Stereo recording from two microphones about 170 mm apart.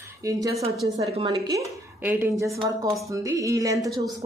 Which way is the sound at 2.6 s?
20° right (ahead or behind).